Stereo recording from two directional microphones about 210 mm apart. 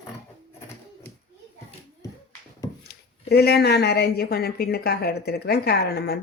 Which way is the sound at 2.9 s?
50° left (ahead or behind).